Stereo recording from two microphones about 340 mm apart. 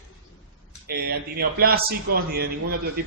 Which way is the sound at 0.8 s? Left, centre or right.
Right.